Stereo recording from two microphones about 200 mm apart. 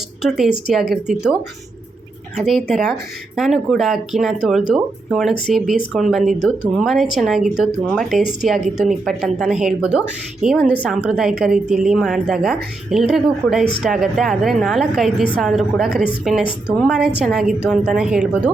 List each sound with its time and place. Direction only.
0.2 s a woman's voice: centre (ahead or behind)